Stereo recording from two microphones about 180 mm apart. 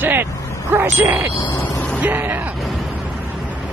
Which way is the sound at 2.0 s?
10° right (ahead or behind).